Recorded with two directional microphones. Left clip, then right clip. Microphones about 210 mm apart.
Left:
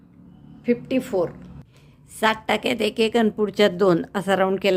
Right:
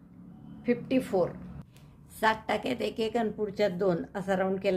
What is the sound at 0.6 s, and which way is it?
A woman's voice, 20° left (ahead or behind).